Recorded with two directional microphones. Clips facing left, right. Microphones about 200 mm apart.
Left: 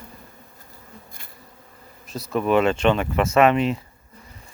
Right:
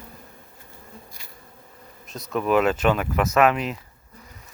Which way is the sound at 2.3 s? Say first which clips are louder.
Left 1 dB; centre (ahead or behind).